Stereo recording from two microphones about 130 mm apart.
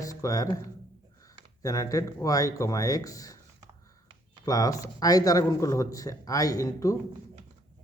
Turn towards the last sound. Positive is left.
turn(degrees=25)  # may be behind; listen again after turning